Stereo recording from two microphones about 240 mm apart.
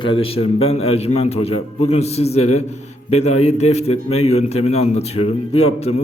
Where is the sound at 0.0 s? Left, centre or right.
Left.